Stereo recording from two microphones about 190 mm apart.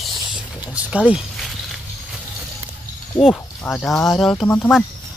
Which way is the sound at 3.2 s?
Centre (ahead or behind).